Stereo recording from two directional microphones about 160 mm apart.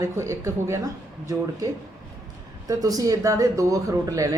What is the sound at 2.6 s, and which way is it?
A woman's voice, 20° right (ahead or behind).